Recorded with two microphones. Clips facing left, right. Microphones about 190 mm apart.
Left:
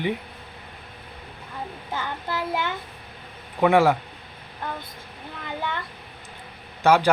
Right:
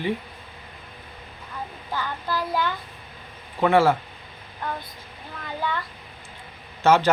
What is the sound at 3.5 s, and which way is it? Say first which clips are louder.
Speech: left 1 dB; 15° left (ahead or behind).